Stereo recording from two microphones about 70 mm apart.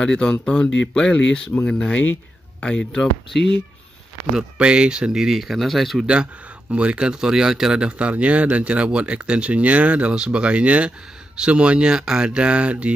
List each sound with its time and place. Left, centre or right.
0.0 s speech: centre
4.4 s speech: centre
6.7 s speech: centre